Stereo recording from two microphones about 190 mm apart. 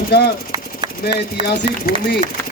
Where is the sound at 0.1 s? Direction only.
60° left (ahead or behind).